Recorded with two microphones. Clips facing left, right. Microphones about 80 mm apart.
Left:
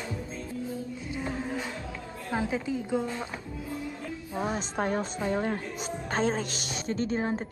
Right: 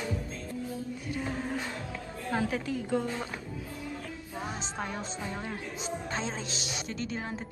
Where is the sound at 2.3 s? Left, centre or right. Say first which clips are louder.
Left 1 dB; centre.